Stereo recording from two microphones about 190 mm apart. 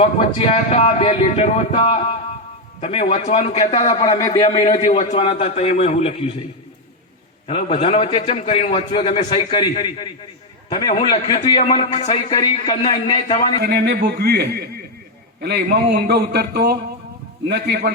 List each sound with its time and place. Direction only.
0.0 s speech: 35° left (ahead or behind)
3.8 s a man's voice: 25° left (ahead or behind)
4.9 s speech: 40° left (ahead or behind)
7.4 s a man's voice: 30° left (ahead or behind)
11.3 s a man's voice: 35° left (ahead or behind)
13.6 s a man's voice: 55° right (ahead or behind)